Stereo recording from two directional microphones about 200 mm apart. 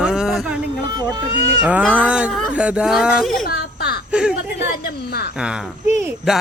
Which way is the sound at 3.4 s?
50° left (ahead or behind).